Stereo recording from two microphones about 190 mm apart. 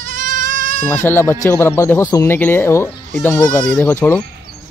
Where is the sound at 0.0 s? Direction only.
45° right (ahead or behind).